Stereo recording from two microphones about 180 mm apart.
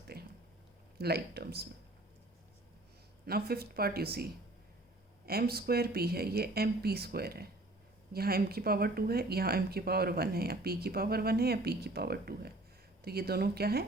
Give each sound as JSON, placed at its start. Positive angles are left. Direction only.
{"t": 0.1, "sound": "a sound", "side_deg": -60}
{"t": 0.9, "sound": "speech", "side_deg": -60}
{"t": 3.2, "sound": "speech", "side_deg": -60}